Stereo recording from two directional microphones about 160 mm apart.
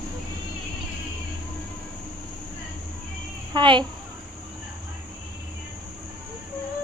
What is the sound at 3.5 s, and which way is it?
Speech, 30° right (ahead or behind).